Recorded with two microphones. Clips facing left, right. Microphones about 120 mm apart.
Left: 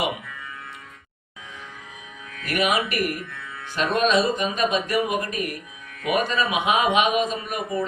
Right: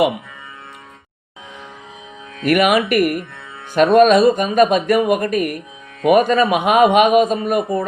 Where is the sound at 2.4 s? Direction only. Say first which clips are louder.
Right 9 dB; 65° right (ahead or behind).